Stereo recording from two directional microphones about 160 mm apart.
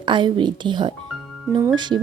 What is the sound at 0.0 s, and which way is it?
Speech, 30° right (ahead or behind).